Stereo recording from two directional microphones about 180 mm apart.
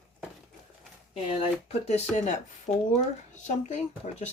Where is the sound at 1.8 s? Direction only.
40° left (ahead or behind).